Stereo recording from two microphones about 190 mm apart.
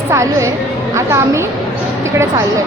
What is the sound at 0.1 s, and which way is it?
A woman's voice, 15° right (ahead or behind).